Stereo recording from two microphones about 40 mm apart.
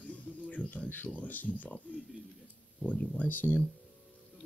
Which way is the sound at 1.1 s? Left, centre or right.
Left.